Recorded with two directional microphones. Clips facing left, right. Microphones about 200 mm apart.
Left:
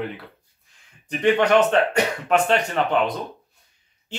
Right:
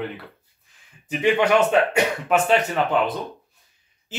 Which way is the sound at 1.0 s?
10° right (ahead or behind).